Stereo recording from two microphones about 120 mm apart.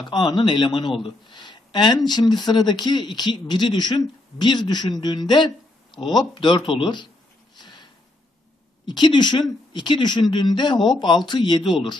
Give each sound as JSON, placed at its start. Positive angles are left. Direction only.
{"t": 0.0, "sound": "speech", "side_deg": 35}
{"t": 7.5, "sound": "a sound", "side_deg": 40}
{"t": 8.8, "sound": "speech", "side_deg": 40}